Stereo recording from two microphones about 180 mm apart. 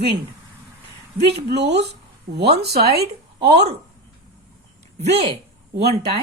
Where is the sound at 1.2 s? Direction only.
65° right (ahead or behind).